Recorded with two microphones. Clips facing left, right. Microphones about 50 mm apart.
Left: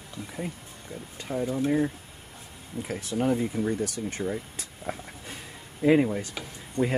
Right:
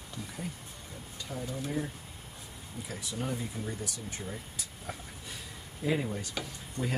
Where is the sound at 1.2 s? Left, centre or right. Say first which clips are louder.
Left 10 dB; left.